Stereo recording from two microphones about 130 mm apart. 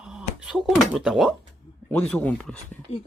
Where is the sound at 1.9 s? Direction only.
10° left (ahead or behind).